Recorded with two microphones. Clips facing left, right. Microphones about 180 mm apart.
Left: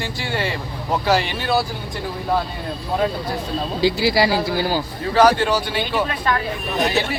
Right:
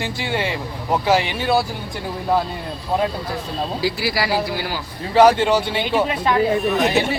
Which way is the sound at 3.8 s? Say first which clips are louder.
Left 7 dB; 25° left (ahead or behind).